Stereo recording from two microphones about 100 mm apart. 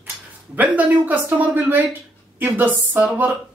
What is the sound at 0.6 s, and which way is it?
Speech, 15° right (ahead or behind).